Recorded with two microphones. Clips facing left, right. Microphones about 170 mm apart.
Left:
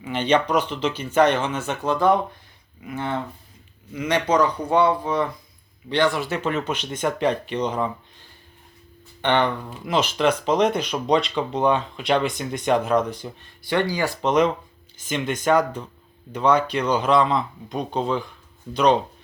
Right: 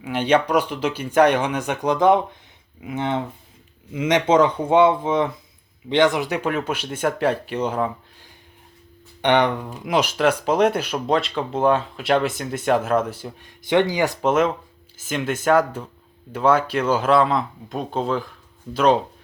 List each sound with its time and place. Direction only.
0.0 s speech: 10° right (ahead or behind)
9.2 s speech: 15° right (ahead or behind)
13.7 s speech: 20° right (ahead or behind)
14.2 s speech: 5° right (ahead or behind)